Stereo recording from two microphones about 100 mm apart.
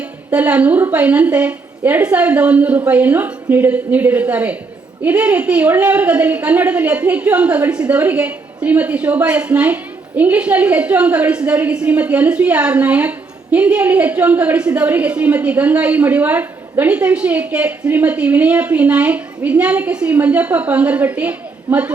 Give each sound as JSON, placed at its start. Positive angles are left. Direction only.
{"t": 0.3, "sound": "a woman's voice", "side_deg": -15}